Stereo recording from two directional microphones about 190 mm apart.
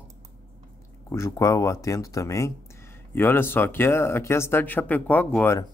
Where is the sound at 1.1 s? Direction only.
15° left (ahead or behind).